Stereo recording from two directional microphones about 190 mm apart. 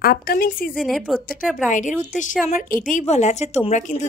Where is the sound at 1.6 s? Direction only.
40° left (ahead or behind).